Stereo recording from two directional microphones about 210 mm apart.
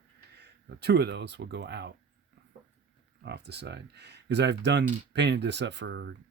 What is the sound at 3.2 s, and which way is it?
Speech, 50° right (ahead or behind).